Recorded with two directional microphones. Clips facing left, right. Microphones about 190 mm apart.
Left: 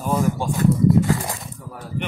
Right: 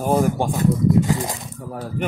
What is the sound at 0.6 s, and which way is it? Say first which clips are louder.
Speech: left 2 dB; 20° right (ahead or behind).